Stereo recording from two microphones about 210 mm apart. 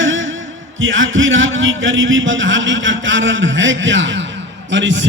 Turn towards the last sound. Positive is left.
turn(degrees=-60)  # may be behind; listen again after turning